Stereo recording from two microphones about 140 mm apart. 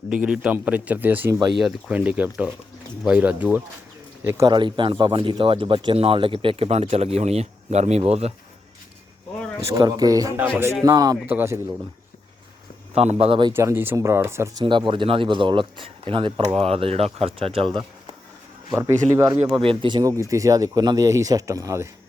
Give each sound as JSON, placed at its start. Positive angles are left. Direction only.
{"t": 0.1, "sound": "a man's voice", "side_deg": -5}
{"t": 4.4, "sound": "speech", "side_deg": -35}
{"t": 9.7, "sound": "speech", "side_deg": -25}
{"t": 11.3, "sound": "a man's voice", "side_deg": -15}
{"t": 12.9, "sound": "speech", "side_deg": -50}
{"t": 13.5, "sound": "speech", "side_deg": -20}
{"t": 14.6, "sound": "speech", "side_deg": -35}
{"t": 18.7, "sound": "speech", "side_deg": -20}
{"t": 19.5, "sound": "speech", "side_deg": -35}
{"t": 20.0, "sound": "speech", "side_deg": -25}